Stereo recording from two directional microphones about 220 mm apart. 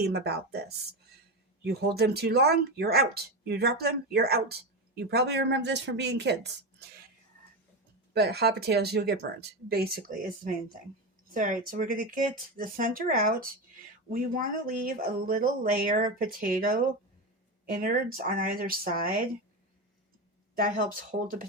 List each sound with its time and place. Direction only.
0.0 s speech: 45° right (ahead or behind)
1.6 s speech: 45° right (ahead or behind)
8.1 s speech: 50° right (ahead or behind)
20.6 s speech: 40° right (ahead or behind)